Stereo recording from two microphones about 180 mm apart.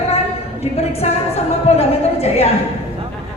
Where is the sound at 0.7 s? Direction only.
35° left (ahead or behind).